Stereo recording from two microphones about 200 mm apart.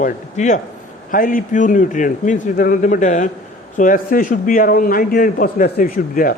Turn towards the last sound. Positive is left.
turn(degrees=45)  # may be behind; listen again after turning